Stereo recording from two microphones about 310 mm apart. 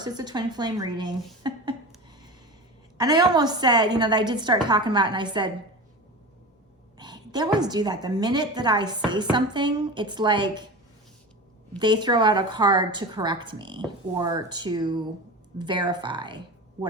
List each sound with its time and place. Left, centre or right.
0.0 s speech: centre
3.0 s a woman's voice: centre
7.0 s a sound: centre
7.6 s a woman's voice: centre
11.8 s a woman's voice: centre